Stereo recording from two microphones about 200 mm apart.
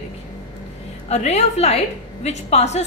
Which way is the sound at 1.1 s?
35° left (ahead or behind).